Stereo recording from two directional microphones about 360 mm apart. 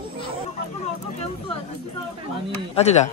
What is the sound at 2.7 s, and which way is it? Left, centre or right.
Speech, centre.